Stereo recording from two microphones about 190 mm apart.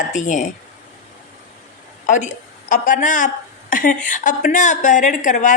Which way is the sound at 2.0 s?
40° left (ahead or behind).